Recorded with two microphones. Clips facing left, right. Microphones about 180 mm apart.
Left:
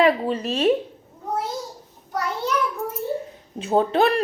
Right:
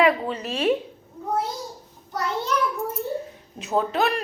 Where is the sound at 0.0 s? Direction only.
30° left (ahead or behind).